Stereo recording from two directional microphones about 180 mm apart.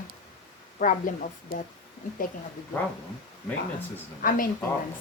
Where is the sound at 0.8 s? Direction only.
45° left (ahead or behind).